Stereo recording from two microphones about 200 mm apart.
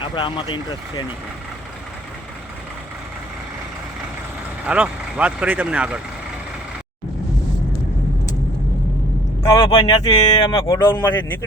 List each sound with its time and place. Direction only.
0.0 s speech: 25° left (ahead or behind)
4.6 s speech: 5° right (ahead or behind)
9.6 s speech: 25° left (ahead or behind)